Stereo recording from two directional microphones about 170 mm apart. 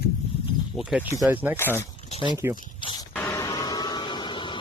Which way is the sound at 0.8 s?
Centre (ahead or behind).